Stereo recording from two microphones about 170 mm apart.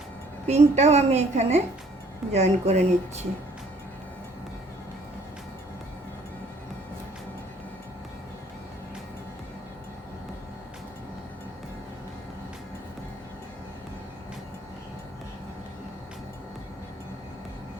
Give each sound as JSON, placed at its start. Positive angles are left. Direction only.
{"t": 0.4, "sound": "a woman's voice", "side_deg": -40}